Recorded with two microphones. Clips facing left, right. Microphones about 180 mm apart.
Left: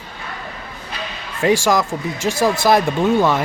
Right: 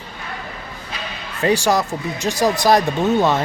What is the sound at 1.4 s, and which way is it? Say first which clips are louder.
Speech: left 2 dB; 10° left (ahead or behind).